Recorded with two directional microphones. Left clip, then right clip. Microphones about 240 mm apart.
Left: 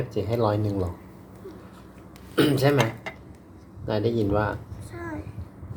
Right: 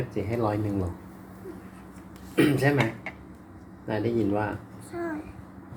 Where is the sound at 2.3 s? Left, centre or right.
Left.